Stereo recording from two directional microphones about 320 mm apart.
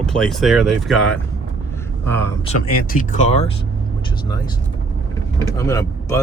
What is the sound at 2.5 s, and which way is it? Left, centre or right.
Speech, left.